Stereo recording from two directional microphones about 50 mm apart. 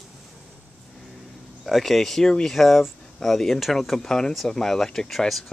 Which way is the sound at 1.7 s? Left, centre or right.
Centre.